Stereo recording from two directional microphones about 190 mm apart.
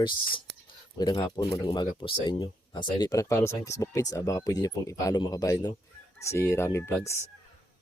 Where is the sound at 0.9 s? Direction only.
20° left (ahead or behind).